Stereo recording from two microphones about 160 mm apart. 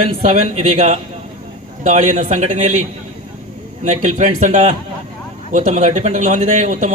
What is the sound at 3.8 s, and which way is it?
A man's voice, 50° right (ahead or behind).